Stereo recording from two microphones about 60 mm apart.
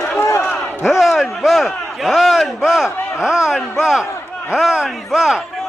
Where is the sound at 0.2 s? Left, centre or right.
Left.